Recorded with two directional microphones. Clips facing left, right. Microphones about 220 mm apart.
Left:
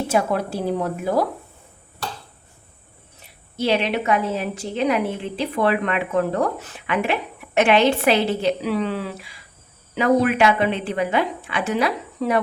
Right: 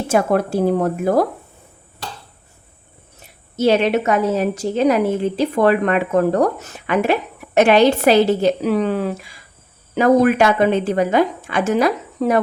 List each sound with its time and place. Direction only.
0.1 s a woman's voice: 50° right (ahead or behind)
3.2 s a woman's voice: 45° right (ahead or behind)